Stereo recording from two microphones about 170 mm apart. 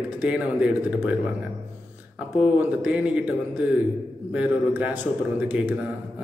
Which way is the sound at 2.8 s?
5° right (ahead or behind).